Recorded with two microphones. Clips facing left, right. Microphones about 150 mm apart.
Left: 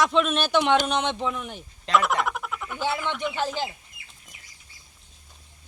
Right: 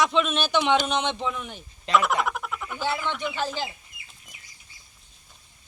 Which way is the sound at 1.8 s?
Centre (ahead or behind).